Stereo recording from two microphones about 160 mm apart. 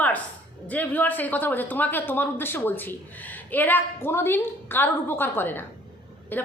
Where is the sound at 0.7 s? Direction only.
10° left (ahead or behind).